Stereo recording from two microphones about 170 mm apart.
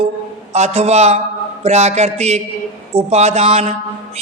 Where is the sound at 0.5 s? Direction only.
40° right (ahead or behind).